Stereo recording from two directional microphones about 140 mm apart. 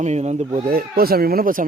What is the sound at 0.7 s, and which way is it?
Speech, 90° right.